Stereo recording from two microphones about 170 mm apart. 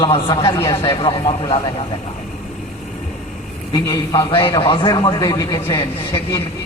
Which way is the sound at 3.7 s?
20° left (ahead or behind).